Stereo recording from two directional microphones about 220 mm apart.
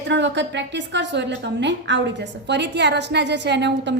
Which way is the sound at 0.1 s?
55° right (ahead or behind).